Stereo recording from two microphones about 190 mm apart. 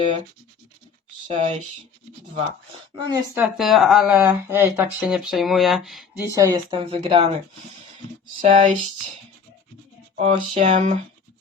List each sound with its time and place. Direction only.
1.3 s speech: 35° right (ahead or behind)
2.9 s speech: 25° right (ahead or behind)
3.3 s speech: 5° right (ahead or behind)
6.2 s speech: 15° right (ahead or behind)
8.4 s speech: 40° right (ahead or behind)
10.2 s speech: 35° right (ahead or behind)